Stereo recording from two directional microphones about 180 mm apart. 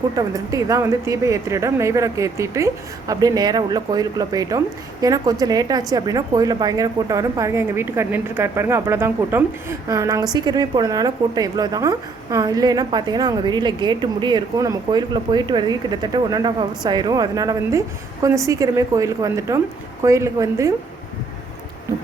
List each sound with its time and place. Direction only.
0.2 s a woman's voice: 20° right (ahead or behind)